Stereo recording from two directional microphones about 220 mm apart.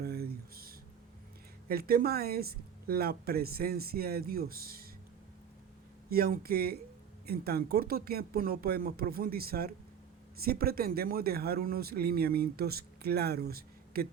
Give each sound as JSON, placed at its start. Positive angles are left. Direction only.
{"t": 0.0, "sound": "a sound", "side_deg": -45}
{"t": 1.6, "sound": "a man's voice", "side_deg": -45}
{"t": 6.1, "sound": "a man's voice", "side_deg": -45}